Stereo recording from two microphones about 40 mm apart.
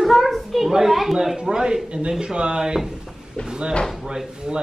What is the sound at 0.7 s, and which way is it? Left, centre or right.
Speech, centre.